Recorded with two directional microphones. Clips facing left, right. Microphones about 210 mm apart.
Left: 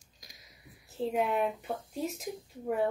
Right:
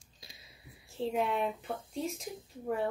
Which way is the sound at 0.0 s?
30° right (ahead or behind).